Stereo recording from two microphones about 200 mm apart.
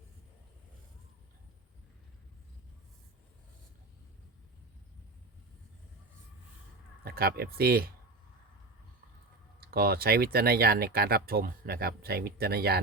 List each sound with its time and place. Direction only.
7.0 s speech: 50° right (ahead or behind)
9.6 s speech: 50° right (ahead or behind)